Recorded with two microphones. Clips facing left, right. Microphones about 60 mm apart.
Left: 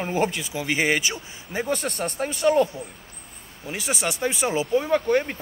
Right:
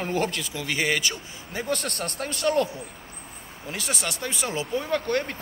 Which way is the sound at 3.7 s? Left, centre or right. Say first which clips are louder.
Left 3 dB; centre.